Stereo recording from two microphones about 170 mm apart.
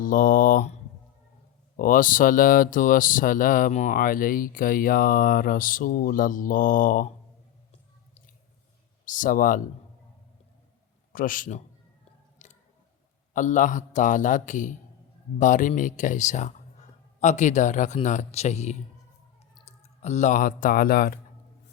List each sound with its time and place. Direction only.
0.0 s speech: 55° left (ahead or behind)
1.7 s speech: 55° left (ahead or behind)
9.0 s speech: 50° left (ahead or behind)
11.1 s speech: 50° left (ahead or behind)
12.4 s a sound: 45° left (ahead or behind)
13.3 s speech: 50° left (ahead or behind)